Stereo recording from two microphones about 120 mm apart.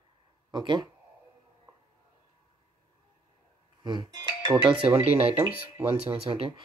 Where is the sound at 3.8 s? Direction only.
40° right (ahead or behind); by 6.4 s 55° right (ahead or behind).